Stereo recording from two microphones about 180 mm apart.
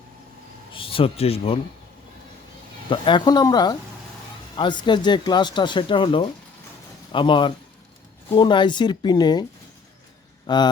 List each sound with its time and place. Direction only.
0.7 s a man's voice: 30° left (ahead or behind)
2.9 s speech: 25° left (ahead or behind)